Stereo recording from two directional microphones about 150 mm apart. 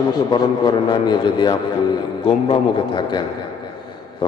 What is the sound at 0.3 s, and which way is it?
A man's voice, 30° left (ahead or behind).